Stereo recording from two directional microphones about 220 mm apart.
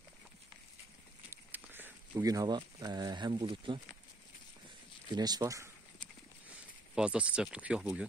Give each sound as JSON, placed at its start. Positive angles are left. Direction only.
{"t": 1.3, "sound": "speech", "side_deg": -10}
{"t": 5.1, "sound": "speech", "side_deg": -20}
{"t": 7.0, "sound": "speech", "side_deg": -5}